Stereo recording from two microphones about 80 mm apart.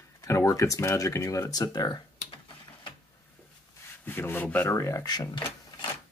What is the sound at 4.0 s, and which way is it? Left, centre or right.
Speech, left.